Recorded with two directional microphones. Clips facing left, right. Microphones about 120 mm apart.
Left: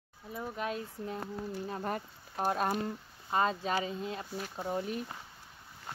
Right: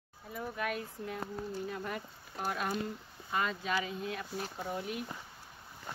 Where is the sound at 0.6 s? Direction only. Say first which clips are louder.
Even; 30° left (ahead or behind).